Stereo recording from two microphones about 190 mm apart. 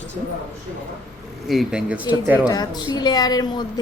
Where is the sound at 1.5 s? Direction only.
Centre (ahead or behind).